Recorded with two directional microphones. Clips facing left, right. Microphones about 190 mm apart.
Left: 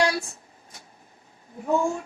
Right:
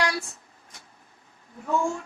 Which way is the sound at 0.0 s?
30° left (ahead or behind).